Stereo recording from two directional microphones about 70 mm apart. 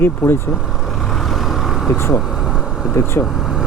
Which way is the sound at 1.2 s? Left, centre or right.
Centre.